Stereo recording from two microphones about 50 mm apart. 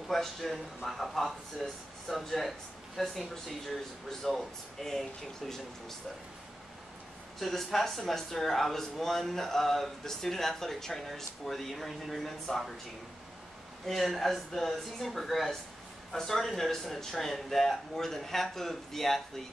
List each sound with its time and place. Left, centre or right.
0.1 s speech: centre
7.3 s speech: centre
13.8 s speech: centre